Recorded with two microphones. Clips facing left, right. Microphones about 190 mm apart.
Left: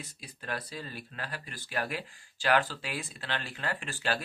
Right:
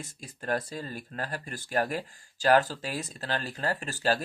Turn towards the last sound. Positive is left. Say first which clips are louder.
# right 5 dB
turn(degrees=-40)  # may be behind; listen again after turning